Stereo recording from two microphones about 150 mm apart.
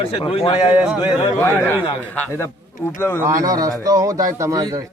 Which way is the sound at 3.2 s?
20° right (ahead or behind).